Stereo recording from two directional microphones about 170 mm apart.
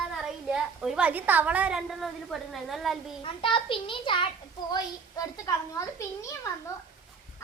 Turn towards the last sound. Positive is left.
turn(degrees=20)  # may be behind; listen again after turning